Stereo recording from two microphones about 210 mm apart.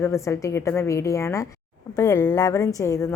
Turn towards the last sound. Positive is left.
turn(degrees=15)  # may be behind; listen again after turning